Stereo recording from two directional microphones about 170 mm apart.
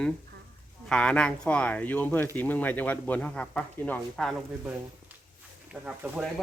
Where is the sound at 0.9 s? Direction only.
5° left (ahead or behind).